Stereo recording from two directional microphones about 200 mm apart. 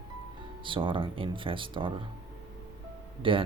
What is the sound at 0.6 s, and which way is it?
Speech, 25° right (ahead or behind).